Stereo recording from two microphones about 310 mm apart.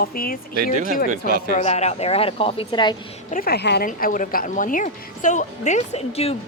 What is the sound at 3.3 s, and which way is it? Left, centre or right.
Speech, left.